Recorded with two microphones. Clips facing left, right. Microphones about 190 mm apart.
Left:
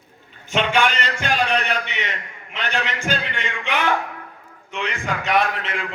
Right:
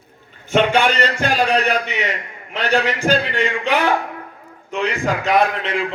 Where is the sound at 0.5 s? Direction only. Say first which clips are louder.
Right 4 dB; 40° right (ahead or behind).